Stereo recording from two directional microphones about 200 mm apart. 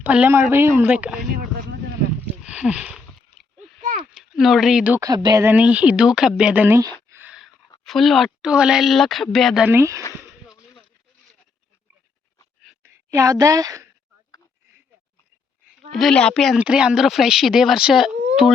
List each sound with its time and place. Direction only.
0.0 s speech: 10° right (ahead or behind)
2.2 s a sound: 5° right (ahead or behind)
3.8 s a sound: 40° right (ahead or behind)
4.1 s speech: centre (ahead or behind)
5.0 s speech: 20° right (ahead or behind)
7.1 s a sound: 10° right (ahead or behind)
7.9 s speech: centre (ahead or behind)
12.8 s a woman's voice: 15° right (ahead or behind)
15.9 s speech: centre (ahead or behind)